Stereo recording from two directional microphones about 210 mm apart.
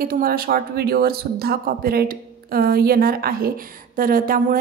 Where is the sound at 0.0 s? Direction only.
45° right (ahead or behind).